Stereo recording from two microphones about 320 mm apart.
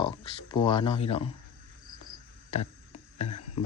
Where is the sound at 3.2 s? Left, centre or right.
Centre.